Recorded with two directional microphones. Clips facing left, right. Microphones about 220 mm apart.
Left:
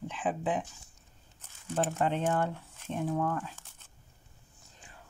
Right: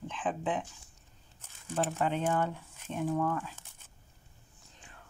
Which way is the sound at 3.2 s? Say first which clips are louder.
Right 1 dB; 15° left (ahead or behind).